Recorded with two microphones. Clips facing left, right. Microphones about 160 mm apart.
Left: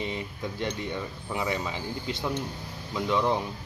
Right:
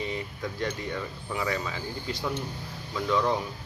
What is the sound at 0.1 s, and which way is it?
Speech, 20° left (ahead or behind).